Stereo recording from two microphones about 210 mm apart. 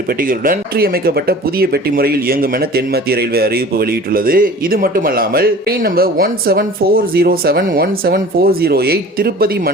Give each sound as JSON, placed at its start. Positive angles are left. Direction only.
{"t": 0.2, "sound": "speech", "side_deg": -40}